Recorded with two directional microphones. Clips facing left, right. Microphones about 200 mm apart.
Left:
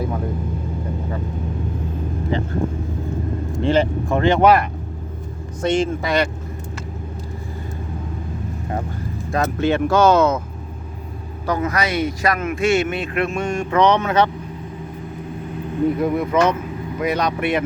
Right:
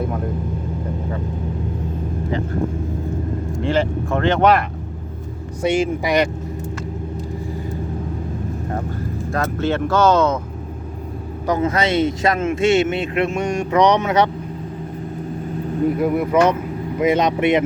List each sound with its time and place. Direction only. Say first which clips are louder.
3.6 s speech: left 2 dB; 20° left (ahead or behind)
5.6 s speech: right 1 dB; 10° right (ahead or behind)
9.3 s speech: left 2 dB; 15° left (ahead or behind)
11.4 s a man's voice: right 3 dB; 25° right (ahead or behind)
16.0 s a man's voice: right 4 dB; 5° right (ahead or behind); by 17.6 s 20° right (ahead or behind)